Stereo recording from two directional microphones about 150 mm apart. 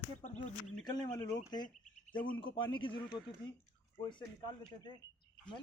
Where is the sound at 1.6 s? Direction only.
65° left (ahead or behind).